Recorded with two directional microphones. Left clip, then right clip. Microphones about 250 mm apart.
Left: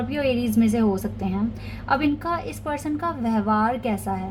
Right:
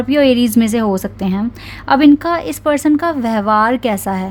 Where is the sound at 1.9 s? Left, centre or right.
Right.